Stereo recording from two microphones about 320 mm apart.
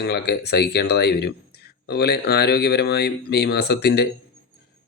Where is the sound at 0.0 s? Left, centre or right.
Left.